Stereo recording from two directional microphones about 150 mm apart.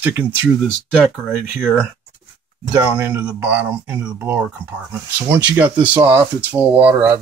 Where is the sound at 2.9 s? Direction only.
10° right (ahead or behind).